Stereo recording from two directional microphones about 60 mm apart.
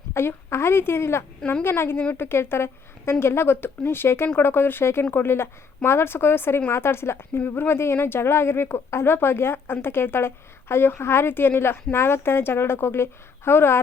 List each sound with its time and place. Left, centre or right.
0.1 s a woman's voice: left